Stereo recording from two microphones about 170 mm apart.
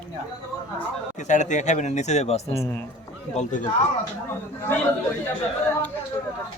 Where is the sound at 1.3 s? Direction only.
45° left (ahead or behind).